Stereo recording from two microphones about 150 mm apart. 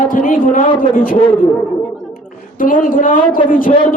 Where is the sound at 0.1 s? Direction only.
65° left (ahead or behind).